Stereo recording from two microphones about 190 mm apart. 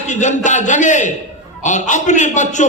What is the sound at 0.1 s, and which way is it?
A man's voice, 40° left (ahead or behind).